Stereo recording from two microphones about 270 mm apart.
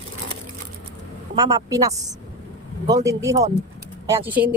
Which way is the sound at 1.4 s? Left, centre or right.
Centre.